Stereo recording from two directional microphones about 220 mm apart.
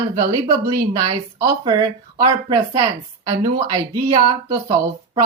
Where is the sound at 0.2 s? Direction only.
15° right (ahead or behind).